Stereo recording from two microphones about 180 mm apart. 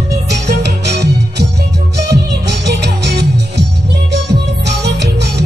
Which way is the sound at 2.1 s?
70° right (ahead or behind).